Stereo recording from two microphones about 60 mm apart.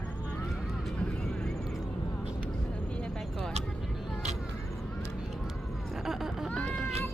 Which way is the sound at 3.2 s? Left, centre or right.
Centre.